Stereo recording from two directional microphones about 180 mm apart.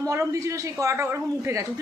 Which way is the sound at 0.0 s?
15° right (ahead or behind).